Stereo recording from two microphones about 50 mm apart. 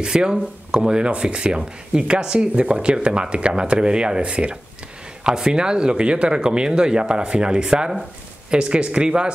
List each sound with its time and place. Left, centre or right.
0.0 s speech: centre